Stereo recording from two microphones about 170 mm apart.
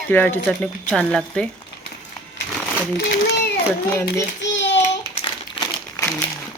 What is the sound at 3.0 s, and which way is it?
Speech, 75° left (ahead or behind).